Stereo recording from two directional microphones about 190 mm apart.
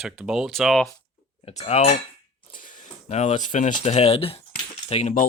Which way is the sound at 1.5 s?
35° left (ahead or behind).